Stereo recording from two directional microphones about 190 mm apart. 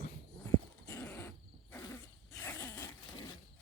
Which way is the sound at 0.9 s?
10° left (ahead or behind).